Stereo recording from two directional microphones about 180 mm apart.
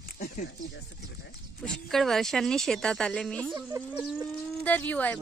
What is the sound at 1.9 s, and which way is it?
Speech, centre (ahead or behind).